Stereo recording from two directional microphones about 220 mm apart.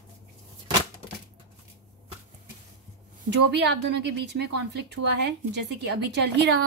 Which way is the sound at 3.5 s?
50° right (ahead or behind).